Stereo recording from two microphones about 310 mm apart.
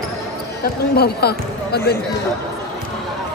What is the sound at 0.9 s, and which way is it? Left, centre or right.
Speech, left.